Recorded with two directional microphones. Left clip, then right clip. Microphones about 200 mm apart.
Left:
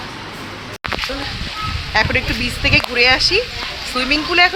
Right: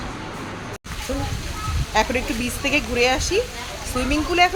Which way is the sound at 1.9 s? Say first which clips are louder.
Left 4 dB; 5° left (ahead or behind).